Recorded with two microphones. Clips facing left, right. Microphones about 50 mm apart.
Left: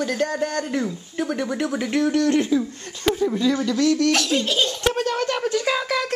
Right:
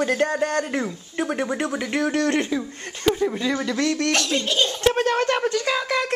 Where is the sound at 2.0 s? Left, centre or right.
Right.